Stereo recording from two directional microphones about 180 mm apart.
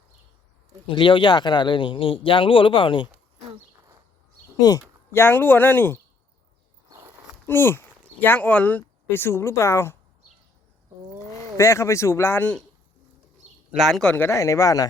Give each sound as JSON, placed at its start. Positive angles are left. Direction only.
{"t": 0.9, "sound": "a man's voice", "side_deg": 30}
{"t": 4.6, "sound": "speech", "side_deg": 15}
{"t": 7.4, "sound": "speech", "side_deg": 15}
{"t": 11.5, "sound": "speech", "side_deg": 15}
{"t": 13.7, "sound": "speech", "side_deg": 0}